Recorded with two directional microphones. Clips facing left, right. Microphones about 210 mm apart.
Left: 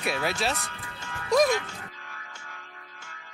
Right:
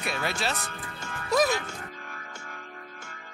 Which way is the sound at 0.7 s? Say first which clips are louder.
Right 2 dB; 50° right (ahead or behind).